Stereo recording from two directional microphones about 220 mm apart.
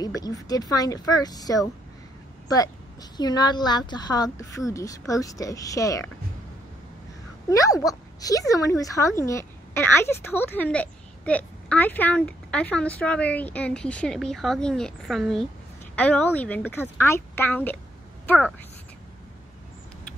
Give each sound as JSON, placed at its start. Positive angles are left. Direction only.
{"t": 0.0, "sound": "speech", "side_deg": 15}
{"t": 7.4, "sound": "speech", "side_deg": 15}